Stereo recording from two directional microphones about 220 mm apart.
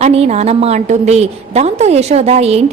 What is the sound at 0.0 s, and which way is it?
A woman's voice, 30° right (ahead or behind).